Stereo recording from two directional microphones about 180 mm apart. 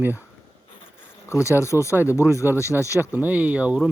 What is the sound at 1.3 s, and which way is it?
Speech, 15° left (ahead or behind).